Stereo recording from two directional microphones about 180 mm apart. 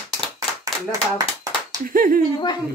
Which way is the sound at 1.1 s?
20° right (ahead or behind).